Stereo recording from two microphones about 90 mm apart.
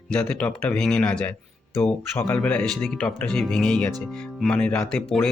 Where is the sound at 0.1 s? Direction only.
10° left (ahead or behind).